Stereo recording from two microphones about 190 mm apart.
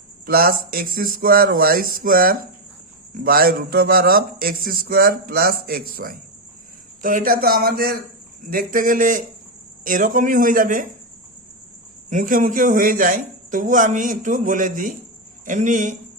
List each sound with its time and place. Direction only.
0.3 s a man's voice: 50° right (ahead or behind)
12.1 s a man's voice: 45° right (ahead or behind)